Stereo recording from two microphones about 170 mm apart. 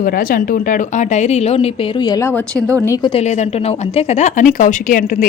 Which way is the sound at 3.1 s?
40° left (ahead or behind).